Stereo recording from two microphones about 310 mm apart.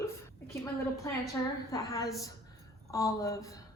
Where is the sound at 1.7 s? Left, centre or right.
Centre.